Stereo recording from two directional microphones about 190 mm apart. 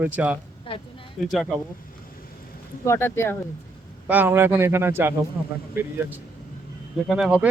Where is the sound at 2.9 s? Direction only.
15° left (ahead or behind).